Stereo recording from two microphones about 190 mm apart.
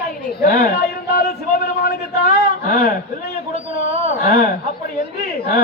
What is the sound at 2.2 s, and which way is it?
A man's voice, 55° left (ahead or behind).